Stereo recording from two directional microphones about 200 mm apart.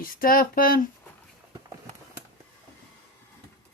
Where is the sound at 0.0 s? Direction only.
45° left (ahead or behind).